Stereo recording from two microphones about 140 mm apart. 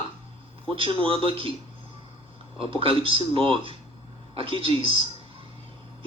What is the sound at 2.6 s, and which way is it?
A man's voice, 40° right (ahead or behind).